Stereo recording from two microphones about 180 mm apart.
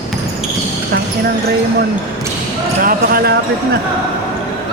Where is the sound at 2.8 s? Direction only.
60° right (ahead or behind).